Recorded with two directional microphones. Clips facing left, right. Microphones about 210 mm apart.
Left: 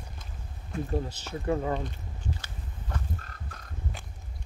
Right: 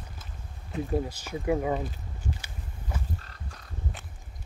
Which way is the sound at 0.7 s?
10° right (ahead or behind).